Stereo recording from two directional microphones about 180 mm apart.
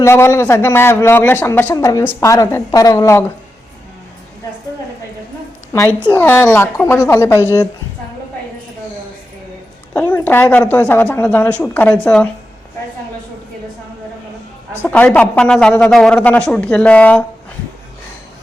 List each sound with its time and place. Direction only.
0.0 s a man's voice: 15° left (ahead or behind)
5.7 s a man's voice: 15° left (ahead or behind)
9.9 s a man's voice: 10° left (ahead or behind)
14.8 s a man's voice: 10° left (ahead or behind)